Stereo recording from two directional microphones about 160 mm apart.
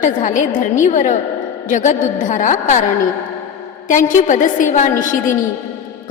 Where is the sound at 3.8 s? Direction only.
50° left (ahead or behind).